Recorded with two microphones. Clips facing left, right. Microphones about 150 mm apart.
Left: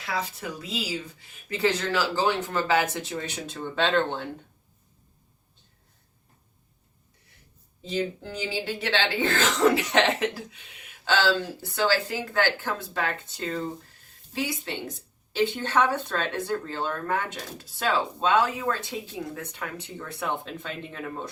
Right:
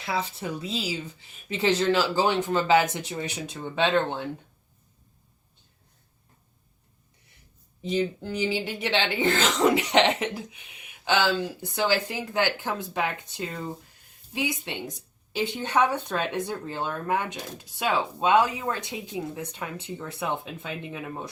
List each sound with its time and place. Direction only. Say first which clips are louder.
0.0 s speech: right 2 dB; 25° right (ahead or behind)
7.8 s speech: right 2 dB; 15° right (ahead or behind)